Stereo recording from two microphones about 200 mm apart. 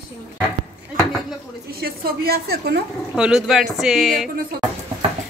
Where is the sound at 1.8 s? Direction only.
50° right (ahead or behind).